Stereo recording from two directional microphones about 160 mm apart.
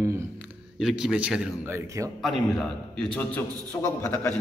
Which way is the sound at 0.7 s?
5° right (ahead or behind).